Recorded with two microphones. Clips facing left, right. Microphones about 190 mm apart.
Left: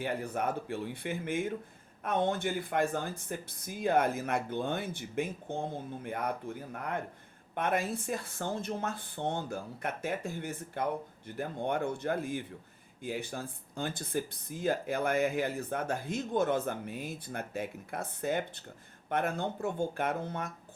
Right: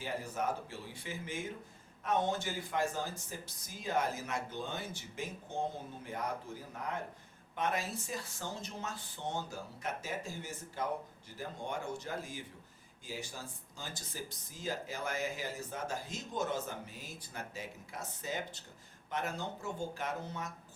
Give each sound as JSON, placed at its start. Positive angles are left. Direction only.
{"t": 0.0, "sound": "speech", "side_deg": 60}